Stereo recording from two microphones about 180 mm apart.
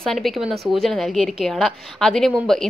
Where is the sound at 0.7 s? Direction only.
Centre (ahead or behind).